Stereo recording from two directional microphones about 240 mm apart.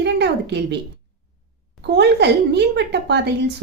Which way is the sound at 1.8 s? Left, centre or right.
Right.